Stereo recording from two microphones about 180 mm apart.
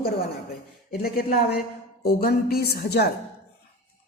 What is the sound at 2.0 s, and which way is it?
A woman's voice, 60° left (ahead or behind).